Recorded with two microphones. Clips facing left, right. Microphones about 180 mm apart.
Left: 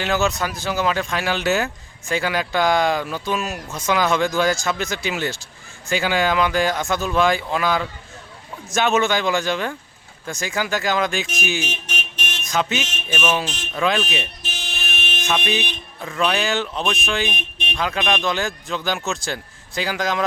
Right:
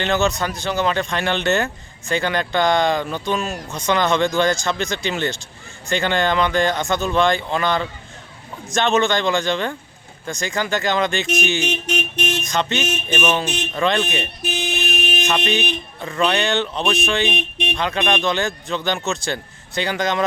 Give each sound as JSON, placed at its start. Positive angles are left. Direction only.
{"t": 0.0, "sound": "speech", "side_deg": 0}
{"t": 12.1, "sound": "a sound", "side_deg": -65}
{"t": 12.4, "sound": "mantra", "side_deg": 5}
{"t": 13.1, "sound": "speech", "side_deg": 5}
{"t": 14.4, "sound": "a sound", "side_deg": -60}
{"t": 15.3, "sound": "speech", "side_deg": 0}